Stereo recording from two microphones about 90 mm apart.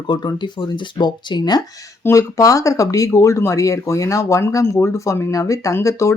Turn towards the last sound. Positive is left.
turn(degrees=35)  # may be behind; listen again after turning